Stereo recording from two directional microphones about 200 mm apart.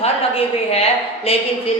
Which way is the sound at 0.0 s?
30° left (ahead or behind).